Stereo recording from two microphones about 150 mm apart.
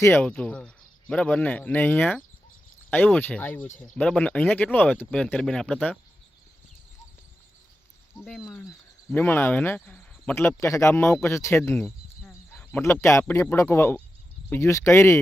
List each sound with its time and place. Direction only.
0.0 s speech: 10° left (ahead or behind)
8.2 s speech: centre (ahead or behind)
9.1 s speech: 15° left (ahead or behind)